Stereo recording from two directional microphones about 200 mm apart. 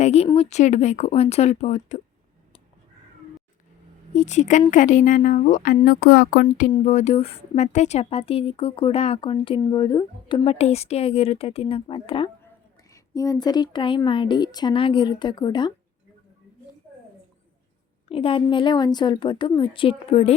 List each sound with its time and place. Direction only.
0.0 s speech: 35° left (ahead or behind)
4.1 s speech: 35° left (ahead or behind); by 15.7 s 20° left (ahead or behind)
18.1 s speech: 25° left (ahead or behind)